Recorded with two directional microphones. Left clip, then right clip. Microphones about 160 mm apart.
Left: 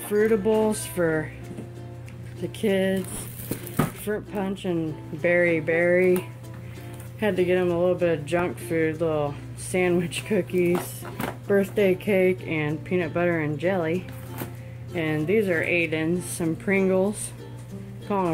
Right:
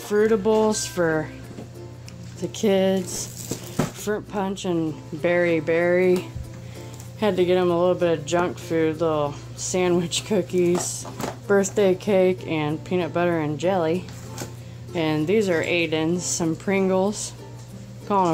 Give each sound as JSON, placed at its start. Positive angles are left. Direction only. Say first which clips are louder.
{"t": 0.1, "sound": "speech", "louder": "right 2 dB", "side_deg": -10}
{"t": 2.5, "sound": "speech", "louder": "right 4 dB", "side_deg": -25}
{"t": 4.0, "sound": "speech", "louder": "right 3 dB", "side_deg": -20}